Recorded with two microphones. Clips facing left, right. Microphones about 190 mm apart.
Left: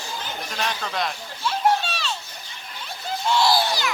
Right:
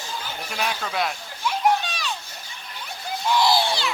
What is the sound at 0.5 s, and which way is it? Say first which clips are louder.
Speech: right 1 dB; 5° right (ahead or behind).